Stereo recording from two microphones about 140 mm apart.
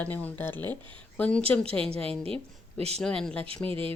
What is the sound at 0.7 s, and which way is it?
Speech, 35° right (ahead or behind).